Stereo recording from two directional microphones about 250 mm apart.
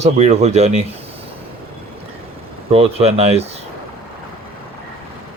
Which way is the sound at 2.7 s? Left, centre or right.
Right.